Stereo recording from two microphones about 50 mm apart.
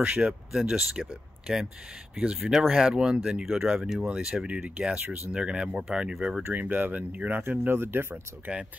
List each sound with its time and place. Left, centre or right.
0.0 s speech: right
0.5 s speech: centre
2.4 s speech: centre
2.7 s speech: centre
4.3 s speech: right
6.4 s speech: right